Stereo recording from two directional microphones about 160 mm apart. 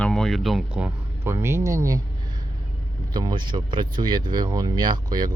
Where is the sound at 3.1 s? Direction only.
30° right (ahead or behind).